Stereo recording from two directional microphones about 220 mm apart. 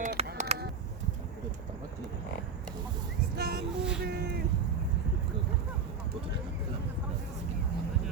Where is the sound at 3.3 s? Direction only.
45° right (ahead or behind).